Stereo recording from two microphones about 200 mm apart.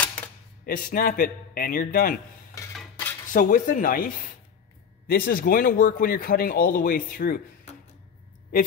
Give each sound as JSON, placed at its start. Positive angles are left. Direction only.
{"t": 0.7, "sound": "speech", "side_deg": 45}
{"t": 2.6, "sound": "cutlery", "side_deg": 15}
{"t": 3.3, "sound": "speech", "side_deg": 40}